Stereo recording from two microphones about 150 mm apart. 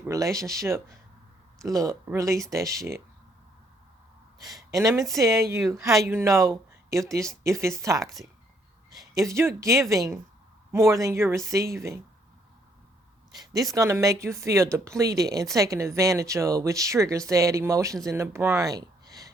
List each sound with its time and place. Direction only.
0.0 s speech: 20° right (ahead or behind)
4.4 s speech: 25° right (ahead or behind)
13.3 s speech: 25° right (ahead or behind)